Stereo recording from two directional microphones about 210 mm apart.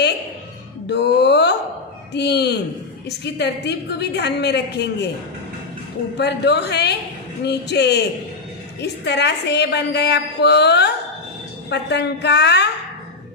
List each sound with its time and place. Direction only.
0.9 s music: 50° left (ahead or behind)
2.1 s a woman's voice: 55° left (ahead or behind)
6.1 s a woman's voice: 55° left (ahead or behind)